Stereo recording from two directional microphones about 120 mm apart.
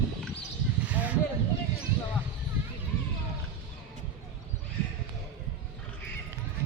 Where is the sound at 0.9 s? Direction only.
15° right (ahead or behind).